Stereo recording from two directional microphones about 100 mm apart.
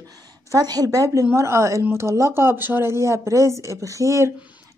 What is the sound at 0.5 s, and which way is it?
Speech, 40° right (ahead or behind).